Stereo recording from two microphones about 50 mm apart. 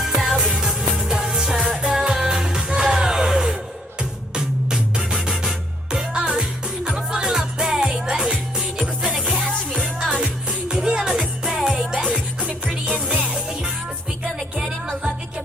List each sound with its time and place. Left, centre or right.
0.0 s music: centre